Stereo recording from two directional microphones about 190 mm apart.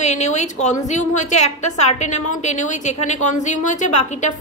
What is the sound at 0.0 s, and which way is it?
A woman's voice, 35° left (ahead or behind).